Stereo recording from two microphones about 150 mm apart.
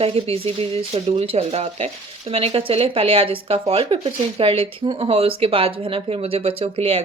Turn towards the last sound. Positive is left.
turn(degrees=-40)  # may be behind; listen again after turning